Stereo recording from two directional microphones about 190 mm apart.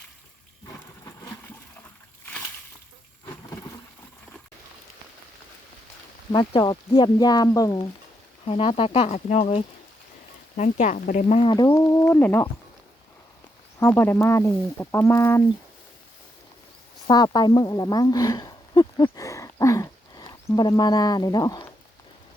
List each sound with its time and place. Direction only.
6.3 s speech: 25° left (ahead or behind)
8.4 s speech: 30° left (ahead or behind)
11.4 s speech: 20° left (ahead or behind)
13.7 s speech: 10° left (ahead or behind)
17.1 s a sound: 20° left (ahead or behind)